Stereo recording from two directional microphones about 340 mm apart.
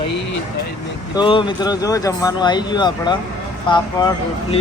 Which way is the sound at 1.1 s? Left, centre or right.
Centre.